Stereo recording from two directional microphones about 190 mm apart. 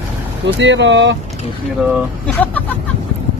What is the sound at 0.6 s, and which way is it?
Speech, 75° right (ahead or behind).